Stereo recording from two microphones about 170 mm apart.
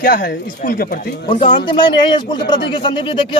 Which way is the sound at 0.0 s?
55° left (ahead or behind).